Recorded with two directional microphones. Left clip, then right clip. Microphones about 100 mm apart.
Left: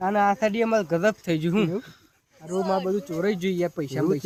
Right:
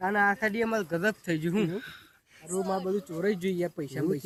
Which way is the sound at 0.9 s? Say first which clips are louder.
Left 6 dB; 90° left.